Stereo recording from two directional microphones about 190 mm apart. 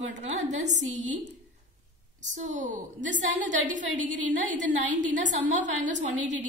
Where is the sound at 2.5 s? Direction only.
40° right (ahead or behind).